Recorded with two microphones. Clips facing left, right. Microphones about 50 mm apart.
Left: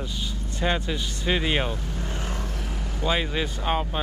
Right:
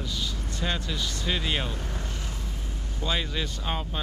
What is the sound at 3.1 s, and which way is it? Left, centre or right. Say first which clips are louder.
Speech: left 4 dB; centre.